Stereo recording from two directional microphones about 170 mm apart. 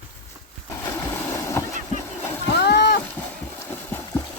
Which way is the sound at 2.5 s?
70° left (ahead or behind).